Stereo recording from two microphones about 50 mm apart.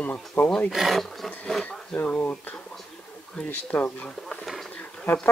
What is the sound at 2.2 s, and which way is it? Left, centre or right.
Speech, left.